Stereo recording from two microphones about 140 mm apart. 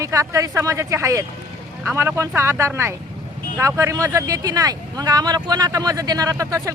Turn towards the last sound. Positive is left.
turn(degrees=-25)  # may be behind; listen again after turning